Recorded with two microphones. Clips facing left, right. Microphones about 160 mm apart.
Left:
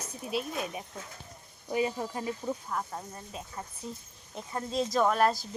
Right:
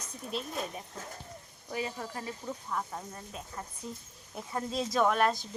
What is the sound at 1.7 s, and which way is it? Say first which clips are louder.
Speech: left 6 dB; 20° left (ahead or behind).